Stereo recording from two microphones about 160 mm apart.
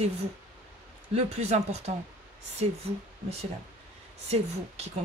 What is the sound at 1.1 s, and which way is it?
Speech, 45° right (ahead or behind).